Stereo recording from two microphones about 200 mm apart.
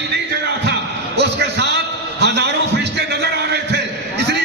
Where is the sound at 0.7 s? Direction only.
60° right (ahead or behind).